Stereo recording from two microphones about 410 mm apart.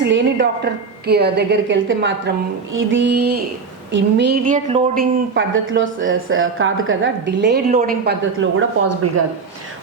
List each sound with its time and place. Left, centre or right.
0.0 s speech: right